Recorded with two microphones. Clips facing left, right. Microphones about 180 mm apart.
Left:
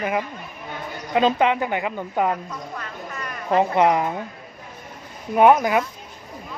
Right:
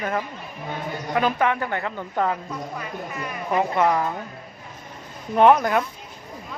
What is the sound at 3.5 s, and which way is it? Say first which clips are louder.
Speech: left 3 dB; 20° left (ahead or behind).